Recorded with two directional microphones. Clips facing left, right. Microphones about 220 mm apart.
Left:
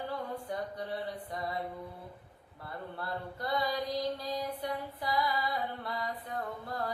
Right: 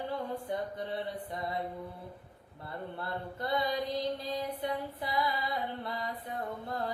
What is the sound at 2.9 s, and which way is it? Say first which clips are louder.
Mantra: left 1 dB; 25° right (ahead or behind).